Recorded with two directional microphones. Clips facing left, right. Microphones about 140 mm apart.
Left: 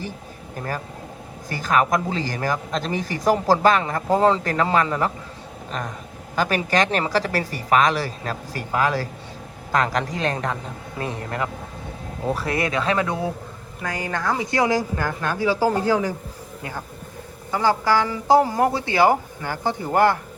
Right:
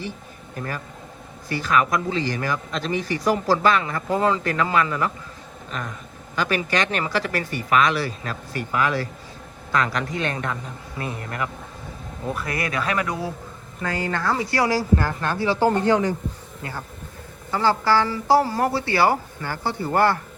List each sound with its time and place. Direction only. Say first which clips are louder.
1.5 s a man's voice: left 1 dB; 40° left (ahead or behind)
6.3 s a man's voice: left 2 dB; 45° left (ahead or behind); by 13.3 s 25° left (ahead or behind)
13.8 s speech: right 1 dB; 15° left (ahead or behind)
17.5 s speech: even; 15° left (ahead or behind)